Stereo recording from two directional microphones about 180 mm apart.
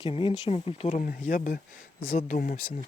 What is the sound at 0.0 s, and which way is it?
Speech, 30° left (ahead or behind).